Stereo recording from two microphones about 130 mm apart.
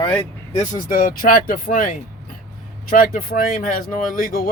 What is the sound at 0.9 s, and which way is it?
Speech, 90° left.